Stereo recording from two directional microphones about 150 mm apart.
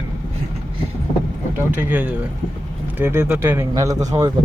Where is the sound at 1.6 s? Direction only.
10° right (ahead or behind).